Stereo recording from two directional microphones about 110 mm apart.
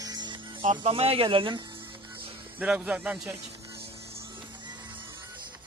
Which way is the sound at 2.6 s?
10° right (ahead or behind).